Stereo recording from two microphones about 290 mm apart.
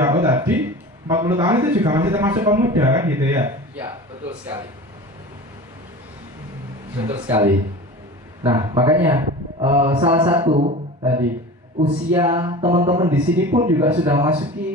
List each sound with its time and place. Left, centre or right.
0.0 s a sound: centre
1.0 s a man's voice: centre
7.1 s a man's voice: centre